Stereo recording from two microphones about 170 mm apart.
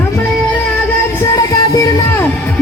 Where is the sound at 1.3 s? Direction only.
20° left (ahead or behind).